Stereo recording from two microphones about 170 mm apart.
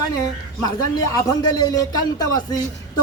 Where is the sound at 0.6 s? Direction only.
20° left (ahead or behind).